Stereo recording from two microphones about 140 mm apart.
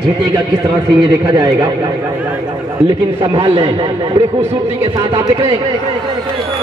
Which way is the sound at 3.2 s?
35° right (ahead or behind).